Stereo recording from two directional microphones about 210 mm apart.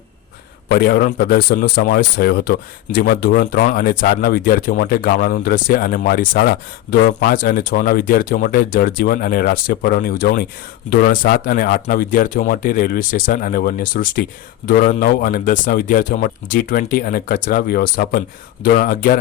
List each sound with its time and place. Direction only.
0.7 s a man's voice: 45° left (ahead or behind)